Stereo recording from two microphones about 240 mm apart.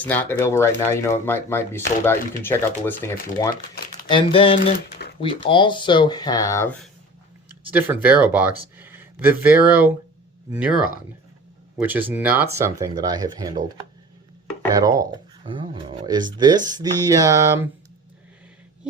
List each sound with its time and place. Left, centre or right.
0.0 s speech: centre; by 4.7 s left
5.0 s a sound: left
5.4 s speech: left
7.6 s speech: centre
8.8 s a sound: centre
10.5 s speech: centre
14.7 s speech: centre